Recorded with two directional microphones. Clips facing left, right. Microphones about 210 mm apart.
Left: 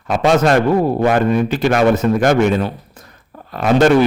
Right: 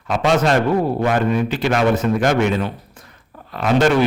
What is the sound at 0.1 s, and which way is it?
A man's voice, 45° left (ahead or behind).